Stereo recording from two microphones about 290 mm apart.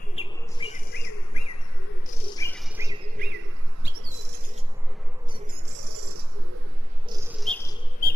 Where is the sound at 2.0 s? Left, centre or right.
Centre.